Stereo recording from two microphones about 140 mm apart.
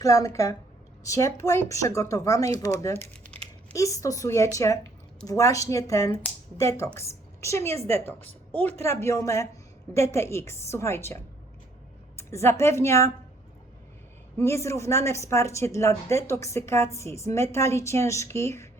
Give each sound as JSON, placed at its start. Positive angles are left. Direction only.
{"t": 0.0, "sound": "a woman's voice", "side_deg": 25}
{"t": 3.1, "sound": "crumpling", "side_deg": 10}
{"t": 3.8, "sound": "a woman's voice", "side_deg": 25}
{"t": 14.3, "sound": "a woman's voice", "side_deg": 20}